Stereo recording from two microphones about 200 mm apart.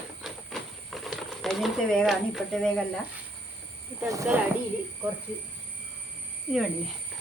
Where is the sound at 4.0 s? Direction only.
15° right (ahead or behind).